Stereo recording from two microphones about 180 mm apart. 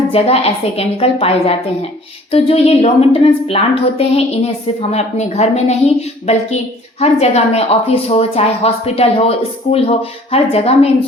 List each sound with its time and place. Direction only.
0.1 s a woman's voice: 35° left (ahead or behind)